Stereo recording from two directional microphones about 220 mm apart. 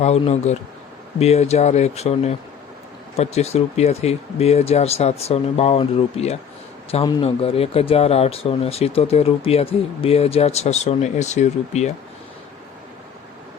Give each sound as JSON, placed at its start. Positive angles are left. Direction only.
{"t": 0.0, "sound": "speech", "side_deg": 30}